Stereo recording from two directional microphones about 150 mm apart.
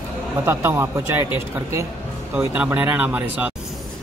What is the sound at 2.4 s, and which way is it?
Speech, 10° right (ahead or behind).